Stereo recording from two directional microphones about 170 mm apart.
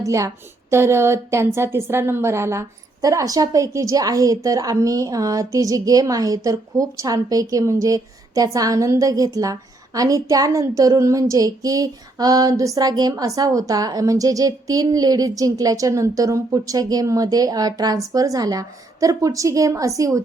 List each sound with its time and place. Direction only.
0.0 s a woman's voice: 20° right (ahead or behind)
0.7 s a sound: 15° right (ahead or behind)
1.5 s a woman's voice: 15° right (ahead or behind)